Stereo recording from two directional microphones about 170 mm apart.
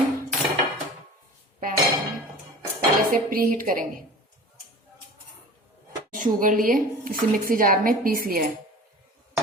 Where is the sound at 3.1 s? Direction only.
55° right (ahead or behind).